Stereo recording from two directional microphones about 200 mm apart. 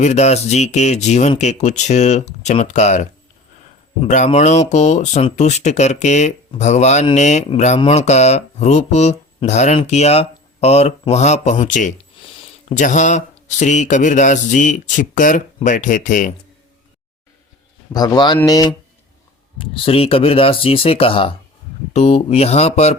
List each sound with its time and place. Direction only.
0.0 s speech: 35° left (ahead or behind)
17.9 s speech: 20° left (ahead or behind)